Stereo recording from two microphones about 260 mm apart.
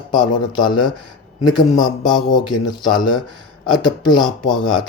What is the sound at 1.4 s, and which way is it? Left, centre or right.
Speech, centre.